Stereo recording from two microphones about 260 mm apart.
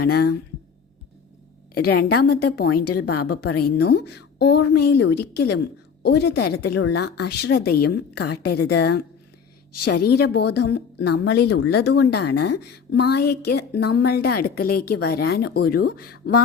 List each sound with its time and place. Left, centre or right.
0.0 s speech: left
1.7 s speech: left
9.7 s a woman's voice: left
10.1 s speech: left